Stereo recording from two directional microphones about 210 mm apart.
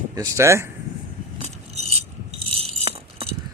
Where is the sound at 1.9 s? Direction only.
30° right (ahead or behind).